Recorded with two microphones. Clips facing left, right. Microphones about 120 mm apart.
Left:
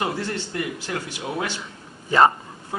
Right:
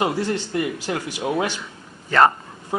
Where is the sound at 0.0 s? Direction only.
20° right (ahead or behind).